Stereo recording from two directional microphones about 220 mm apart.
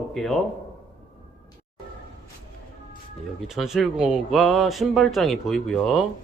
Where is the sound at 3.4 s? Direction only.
Centre (ahead or behind).